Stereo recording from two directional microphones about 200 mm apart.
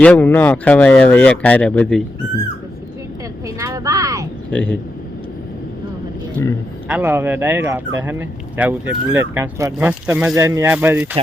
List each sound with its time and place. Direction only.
0.0 s speech: 10° left (ahead or behind)
3.4 s speech: 15° right (ahead or behind)
4.5 s speech: 5° left (ahead or behind)
6.8 s speech: 10° right (ahead or behind)